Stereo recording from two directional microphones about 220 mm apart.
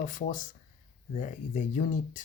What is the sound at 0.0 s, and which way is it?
Speech, 35° left (ahead or behind).